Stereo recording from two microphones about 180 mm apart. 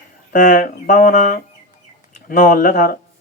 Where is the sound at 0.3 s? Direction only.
45° left (ahead or behind).